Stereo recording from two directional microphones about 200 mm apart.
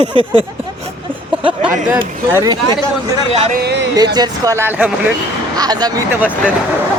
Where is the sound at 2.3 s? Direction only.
20° right (ahead or behind).